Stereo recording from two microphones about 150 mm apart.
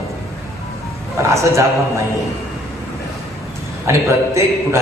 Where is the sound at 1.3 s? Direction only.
20° right (ahead or behind).